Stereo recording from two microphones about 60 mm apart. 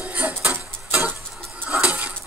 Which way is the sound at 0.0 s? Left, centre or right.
Right.